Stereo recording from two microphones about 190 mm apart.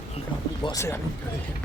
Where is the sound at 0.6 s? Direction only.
15° left (ahead or behind).